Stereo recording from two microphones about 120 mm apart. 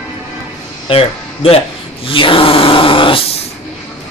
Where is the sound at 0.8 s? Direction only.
55° left (ahead or behind).